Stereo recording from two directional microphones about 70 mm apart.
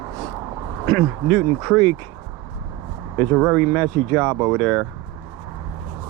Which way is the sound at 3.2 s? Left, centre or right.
Centre.